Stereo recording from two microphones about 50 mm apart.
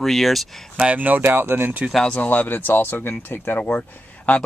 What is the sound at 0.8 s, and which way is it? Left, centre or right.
Speech, right.